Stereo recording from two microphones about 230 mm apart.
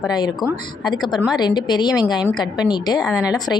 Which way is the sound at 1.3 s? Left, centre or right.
Centre.